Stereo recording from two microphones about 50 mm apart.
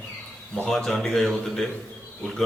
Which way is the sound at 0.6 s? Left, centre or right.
Centre.